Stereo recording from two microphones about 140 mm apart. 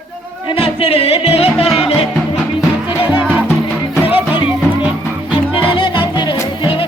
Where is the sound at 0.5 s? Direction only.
45° left (ahead or behind).